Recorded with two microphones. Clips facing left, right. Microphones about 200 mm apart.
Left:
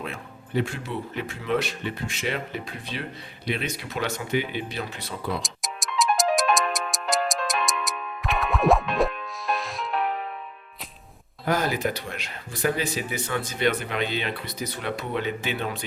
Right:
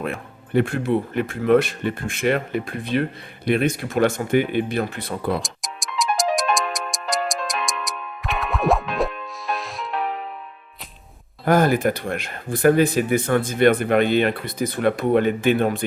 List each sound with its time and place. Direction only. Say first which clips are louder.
0.0 s speech: right 7 dB; 55° right (ahead or behind)
5.4 s music: right 1 dB; centre (ahead or behind)
11.4 s speech: right 7 dB; 50° right (ahead or behind)